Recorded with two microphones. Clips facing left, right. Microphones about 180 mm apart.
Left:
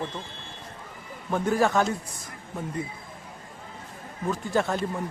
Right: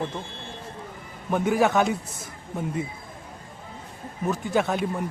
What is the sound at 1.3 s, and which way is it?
Speech, centre (ahead or behind).